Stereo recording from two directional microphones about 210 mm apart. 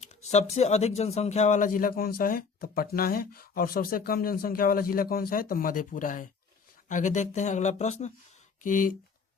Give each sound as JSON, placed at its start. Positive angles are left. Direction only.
{"t": 0.3, "sound": "a man's voice", "side_deg": 30}